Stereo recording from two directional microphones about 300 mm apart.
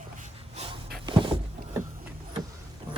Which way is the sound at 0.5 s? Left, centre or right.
Centre.